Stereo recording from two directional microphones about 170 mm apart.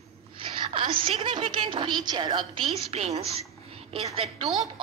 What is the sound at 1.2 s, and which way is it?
A woman's voice, 30° right (ahead or behind).